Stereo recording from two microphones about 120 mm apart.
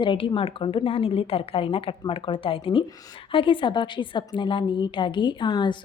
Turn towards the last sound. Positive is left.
turn(degrees=40)  # may be behind; listen again after turning